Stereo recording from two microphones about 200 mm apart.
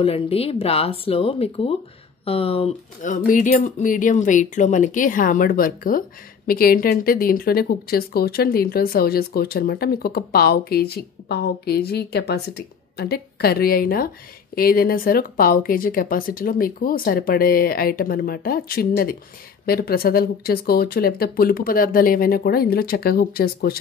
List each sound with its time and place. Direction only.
0.0 s speech: 30° left (ahead or behind); by 23.8 s 50° left (ahead or behind)